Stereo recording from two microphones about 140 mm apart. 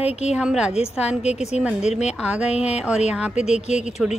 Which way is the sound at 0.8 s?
50° left (ahead or behind).